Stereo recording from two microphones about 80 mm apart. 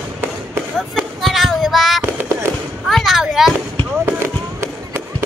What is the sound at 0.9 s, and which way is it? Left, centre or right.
Child singing, centre.